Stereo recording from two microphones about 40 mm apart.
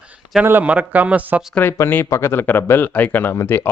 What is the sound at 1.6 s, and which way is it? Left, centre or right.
Speech, left.